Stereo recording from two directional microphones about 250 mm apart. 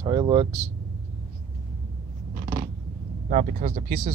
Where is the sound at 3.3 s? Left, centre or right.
Right.